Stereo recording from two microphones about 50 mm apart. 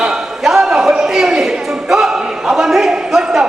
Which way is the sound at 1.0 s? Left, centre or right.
Centre.